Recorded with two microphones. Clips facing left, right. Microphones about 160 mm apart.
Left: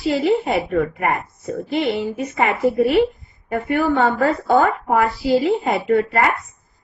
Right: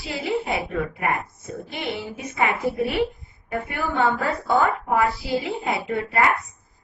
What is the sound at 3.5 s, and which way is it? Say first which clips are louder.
Speech: left 8 dB; 50° left (ahead or behind).